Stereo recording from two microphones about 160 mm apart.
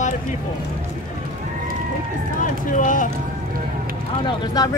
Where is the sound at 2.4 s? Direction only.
55° left (ahead or behind).